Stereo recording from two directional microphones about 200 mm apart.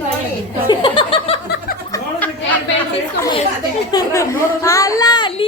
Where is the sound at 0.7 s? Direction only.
25° left (ahead or behind).